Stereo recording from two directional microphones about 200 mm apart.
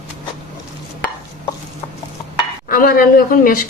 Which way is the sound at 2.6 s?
45° left (ahead or behind).